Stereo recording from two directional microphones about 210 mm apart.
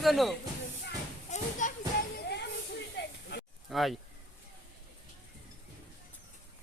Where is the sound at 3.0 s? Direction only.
55° left (ahead or behind).